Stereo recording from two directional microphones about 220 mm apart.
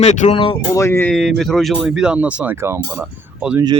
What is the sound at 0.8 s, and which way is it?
Speech, 10° left (ahead or behind).